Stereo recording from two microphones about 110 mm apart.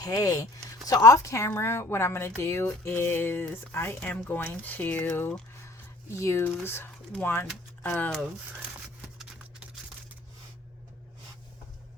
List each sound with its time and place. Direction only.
0.0 s speech: 35° left (ahead or behind); by 8.1 s 15° left (ahead or behind)